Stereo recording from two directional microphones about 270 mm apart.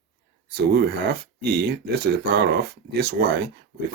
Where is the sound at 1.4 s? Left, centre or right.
Right.